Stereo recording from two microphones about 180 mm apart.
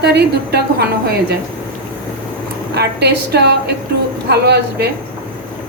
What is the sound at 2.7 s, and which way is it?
A woman's voice, 65° right (ahead or behind).